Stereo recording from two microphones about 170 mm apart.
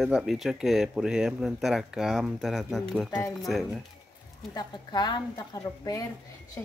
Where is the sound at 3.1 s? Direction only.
15° left (ahead or behind).